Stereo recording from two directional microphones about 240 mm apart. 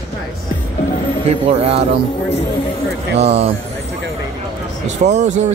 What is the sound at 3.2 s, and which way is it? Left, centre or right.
Speech, right.